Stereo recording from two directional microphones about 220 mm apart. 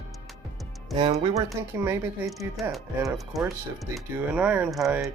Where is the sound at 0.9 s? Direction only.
20° right (ahead or behind).